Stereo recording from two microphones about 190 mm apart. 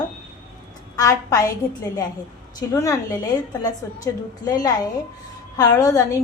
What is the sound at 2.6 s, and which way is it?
A woman's voice, 20° left (ahead or behind).